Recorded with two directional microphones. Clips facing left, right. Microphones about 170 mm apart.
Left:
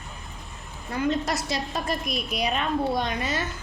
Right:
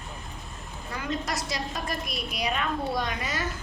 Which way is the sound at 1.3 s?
25° left (ahead or behind).